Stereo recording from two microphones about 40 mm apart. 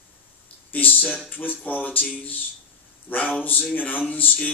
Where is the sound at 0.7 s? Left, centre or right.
Left.